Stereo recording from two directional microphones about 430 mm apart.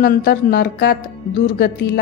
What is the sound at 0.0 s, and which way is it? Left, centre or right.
A woman's voice, left.